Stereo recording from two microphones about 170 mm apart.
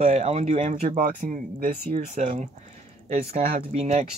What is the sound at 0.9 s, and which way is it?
Speech, 55° right (ahead or behind).